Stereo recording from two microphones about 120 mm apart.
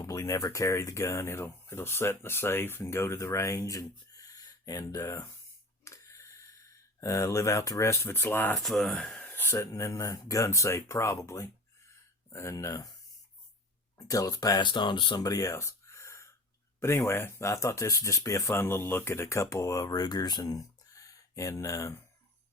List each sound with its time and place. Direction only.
0.0 s speech: 25° left (ahead or behind)
5.8 s a sound: 25° left (ahead or behind)
8.5 s speech: centre (ahead or behind); by 12.9 s 25° left (ahead or behind)
14.1 s speech: 30° left (ahead or behind)
15.2 s a sound: 30° left (ahead or behind)
16.8 s speech: 20° left (ahead or behind)